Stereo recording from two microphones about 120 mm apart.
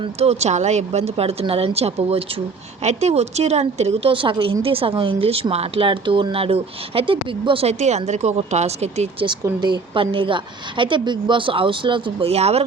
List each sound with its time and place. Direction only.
0.2 s a woman's voice: 65° right (ahead or behind)
4.1 s speech: 45° right (ahead or behind); by 9.0 s 65° right (ahead or behind)
9.2 s speech: 40° right (ahead or behind)
12.3 s a woman's voice: 60° right (ahead or behind)